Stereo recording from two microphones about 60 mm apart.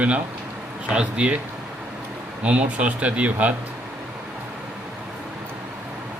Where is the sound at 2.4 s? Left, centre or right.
Right.